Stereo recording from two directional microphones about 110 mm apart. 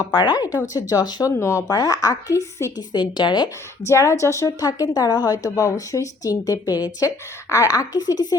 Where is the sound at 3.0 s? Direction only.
45° left (ahead or behind).